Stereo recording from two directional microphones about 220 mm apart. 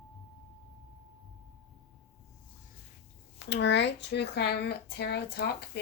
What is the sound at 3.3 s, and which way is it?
Speech, 50° left (ahead or behind).